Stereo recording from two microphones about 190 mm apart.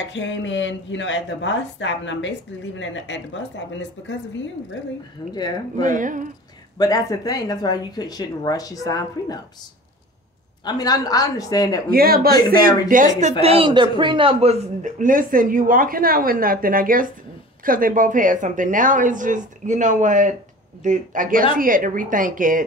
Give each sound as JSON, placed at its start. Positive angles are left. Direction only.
{"t": 0.1, "sound": "a woman's voice", "side_deg": 75}
{"t": 5.3, "sound": "speech", "side_deg": 20}
{"t": 5.8, "sound": "speech", "side_deg": -45}
{"t": 6.8, "sound": "speech", "side_deg": 20}
{"t": 10.6, "sound": "speech", "side_deg": 20}
{"t": 11.9, "sound": "speech", "side_deg": -50}
{"t": 13.4, "sound": "speech", "side_deg": -30}